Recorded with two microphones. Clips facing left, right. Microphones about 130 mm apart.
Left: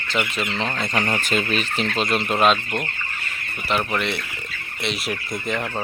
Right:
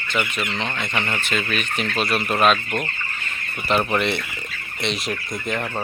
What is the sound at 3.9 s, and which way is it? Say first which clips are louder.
Speech: right 3 dB; centre (ahead or behind).